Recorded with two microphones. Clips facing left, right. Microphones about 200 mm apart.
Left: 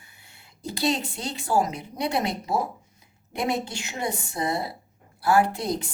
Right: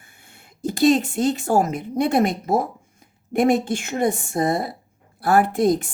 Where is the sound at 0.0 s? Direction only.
50° right (ahead or behind).